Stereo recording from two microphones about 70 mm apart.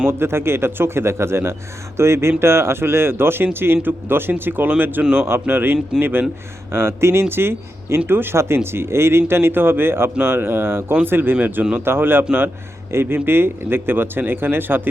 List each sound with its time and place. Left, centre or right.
0.1 s speech: right